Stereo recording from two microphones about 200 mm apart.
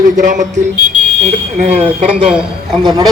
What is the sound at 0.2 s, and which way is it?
Speech, 40° right (ahead or behind).